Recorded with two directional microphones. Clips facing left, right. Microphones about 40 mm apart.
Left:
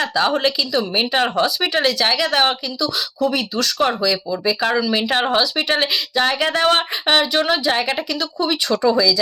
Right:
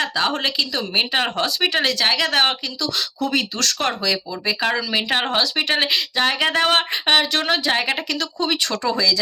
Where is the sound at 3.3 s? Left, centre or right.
Right.